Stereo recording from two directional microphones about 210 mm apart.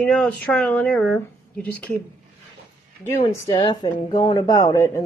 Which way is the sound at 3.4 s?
20° left (ahead or behind).